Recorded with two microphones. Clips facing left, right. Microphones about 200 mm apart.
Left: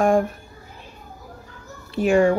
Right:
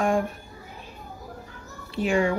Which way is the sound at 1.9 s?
45° left (ahead or behind).